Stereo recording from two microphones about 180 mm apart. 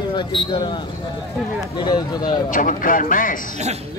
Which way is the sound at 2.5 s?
45° left (ahead or behind).